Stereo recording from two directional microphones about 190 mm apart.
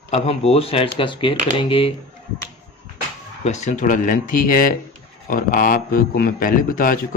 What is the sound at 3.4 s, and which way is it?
A man's voice, 35° left (ahead or behind).